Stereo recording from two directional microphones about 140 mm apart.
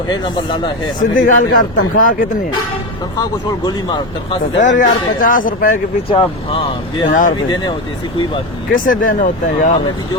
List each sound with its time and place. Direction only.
0.1 s speech: 35° left (ahead or behind)
1.1 s speech: 70° left (ahead or behind)
3.2 s speech: 30° left (ahead or behind)
4.6 s speech: 70° left (ahead or behind)
6.1 s speech: 40° left (ahead or behind)
7.1 s speech: 70° left (ahead or behind)
8.7 s speech: 80° left